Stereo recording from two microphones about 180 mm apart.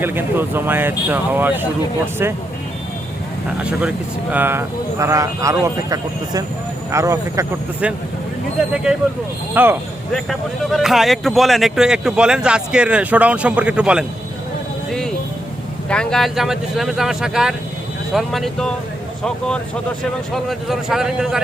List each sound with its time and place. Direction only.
0.0 s speech: 10° right (ahead or behind)
3.6 s speech: 5° right (ahead or behind)
10.1 s speech: centre (ahead or behind)
15.9 s speech: 5° left (ahead or behind)
20.3 s speech: centre (ahead or behind)